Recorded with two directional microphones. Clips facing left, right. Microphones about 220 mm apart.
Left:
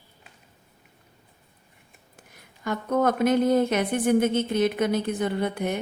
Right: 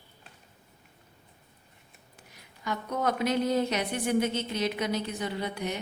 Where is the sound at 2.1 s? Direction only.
50° left (ahead or behind).